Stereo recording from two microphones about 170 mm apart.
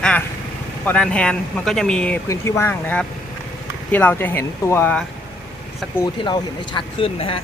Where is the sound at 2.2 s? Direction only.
15° left (ahead or behind).